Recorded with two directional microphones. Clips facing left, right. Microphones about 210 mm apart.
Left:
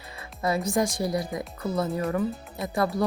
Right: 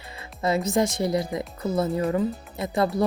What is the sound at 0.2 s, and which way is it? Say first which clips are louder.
Speech: right 2 dB; 25° right (ahead or behind).